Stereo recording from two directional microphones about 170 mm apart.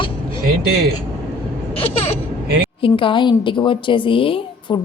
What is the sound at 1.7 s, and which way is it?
A woman's voice, 35° left (ahead or behind).